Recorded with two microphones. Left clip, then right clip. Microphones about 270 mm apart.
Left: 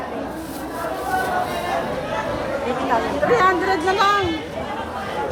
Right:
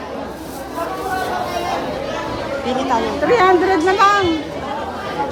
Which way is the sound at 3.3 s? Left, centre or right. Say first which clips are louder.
Right 5 dB; right.